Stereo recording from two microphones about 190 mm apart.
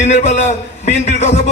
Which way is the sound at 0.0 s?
35° left (ahead or behind).